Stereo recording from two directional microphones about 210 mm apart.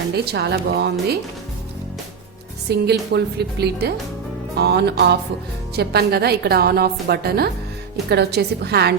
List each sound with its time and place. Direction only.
0.1 s a woman's voice: 50° right (ahead or behind)
2.6 s a woman's voice: 50° right (ahead or behind)